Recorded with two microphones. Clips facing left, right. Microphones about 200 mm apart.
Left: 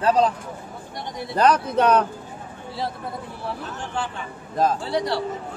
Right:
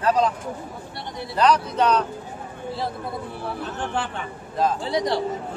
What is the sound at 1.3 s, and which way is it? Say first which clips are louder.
Speech: left 1 dB; 50° left (ahead or behind).